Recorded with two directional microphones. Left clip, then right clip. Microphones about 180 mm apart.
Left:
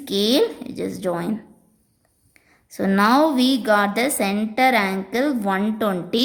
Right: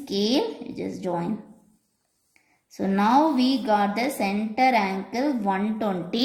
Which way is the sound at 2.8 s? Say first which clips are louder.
Left 4 dB; 40° left (ahead or behind).